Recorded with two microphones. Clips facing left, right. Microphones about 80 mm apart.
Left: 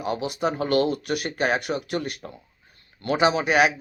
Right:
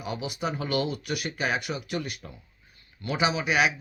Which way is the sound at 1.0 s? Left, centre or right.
Left.